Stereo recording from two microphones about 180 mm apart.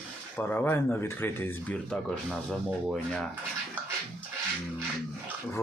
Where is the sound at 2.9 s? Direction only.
5° left (ahead or behind).